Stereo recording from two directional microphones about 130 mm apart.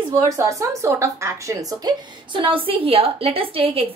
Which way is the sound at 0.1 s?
25° right (ahead or behind).